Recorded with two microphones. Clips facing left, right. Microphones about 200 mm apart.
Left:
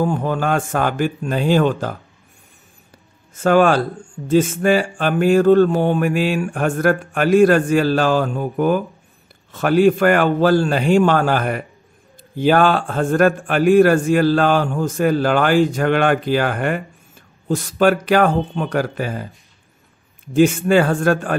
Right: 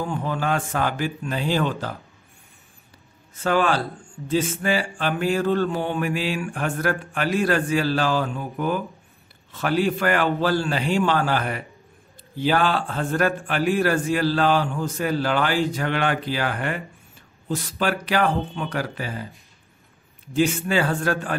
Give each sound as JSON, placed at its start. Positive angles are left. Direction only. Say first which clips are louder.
{"t": 0.0, "sound": "a man's voice", "louder": "left 7 dB", "side_deg": 50}
{"t": 3.3, "sound": "a man's voice", "louder": "left 7 dB", "side_deg": 45}
{"t": 20.3, "sound": "a man's voice", "louder": "left 7 dB", "side_deg": 50}